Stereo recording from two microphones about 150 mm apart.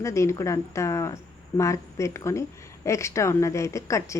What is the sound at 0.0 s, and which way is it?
A woman's voice, 20° left (ahead or behind).